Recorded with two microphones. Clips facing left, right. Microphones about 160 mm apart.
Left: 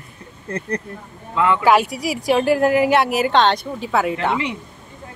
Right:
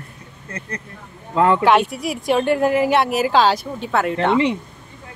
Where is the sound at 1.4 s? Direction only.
40° right (ahead or behind).